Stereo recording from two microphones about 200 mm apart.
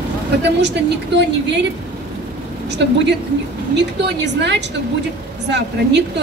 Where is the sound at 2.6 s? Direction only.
60° right (ahead or behind).